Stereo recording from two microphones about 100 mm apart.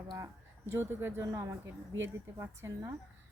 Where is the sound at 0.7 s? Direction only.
25° right (ahead or behind).